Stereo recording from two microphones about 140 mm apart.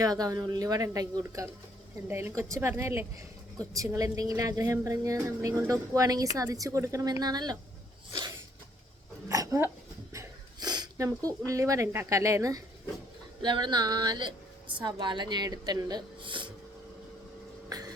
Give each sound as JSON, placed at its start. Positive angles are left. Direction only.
{"t": 0.0, "sound": "a woman's voice", "side_deg": -25}
{"t": 9.3, "sound": "dog", "side_deg": -25}
{"t": 10.1, "sound": "speech", "side_deg": -25}
{"t": 17.7, "sound": "a sound", "side_deg": -25}